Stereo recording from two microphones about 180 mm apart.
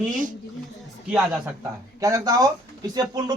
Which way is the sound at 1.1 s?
10° right (ahead or behind).